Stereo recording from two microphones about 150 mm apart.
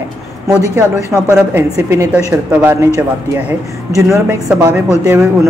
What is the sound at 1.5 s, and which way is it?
A woman's voice, 20° right (ahead or behind).